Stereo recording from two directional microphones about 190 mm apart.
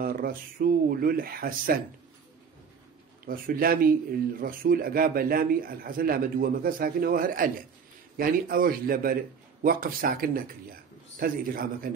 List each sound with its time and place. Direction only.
0.0 s speech: 50° right (ahead or behind)
3.3 s speech: 50° right (ahead or behind)